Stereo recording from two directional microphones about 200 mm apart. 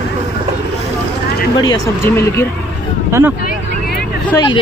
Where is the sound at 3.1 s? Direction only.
15° right (ahead or behind).